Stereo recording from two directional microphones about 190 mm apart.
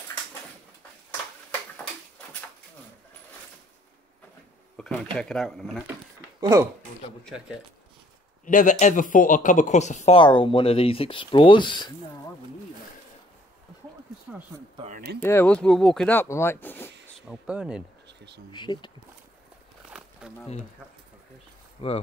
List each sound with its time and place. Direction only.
4.7 s a sound: 5° left (ahead or behind)
5.1 s speech: 5° left (ahead or behind)
6.4 s speech: 15° right (ahead or behind)
7.2 s speech: 5° right (ahead or behind)
8.5 s speech: 40° left (ahead or behind); by 11.9 s 25° left (ahead or behind)
15.1 s speech: 10° left (ahead or behind)
17.3 s speech: 5° right (ahead or behind)
18.0 s insect: 65° right (ahead or behind)
18.5 s speech: 25° left (ahead or behind)
19.9 s a sound: 5° right (ahead or behind)
21.8 s speech: 30° left (ahead or behind)